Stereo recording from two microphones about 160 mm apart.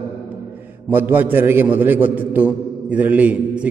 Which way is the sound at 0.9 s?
10° right (ahead or behind).